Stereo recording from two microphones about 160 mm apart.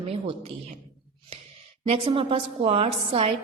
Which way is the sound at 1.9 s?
35° right (ahead or behind).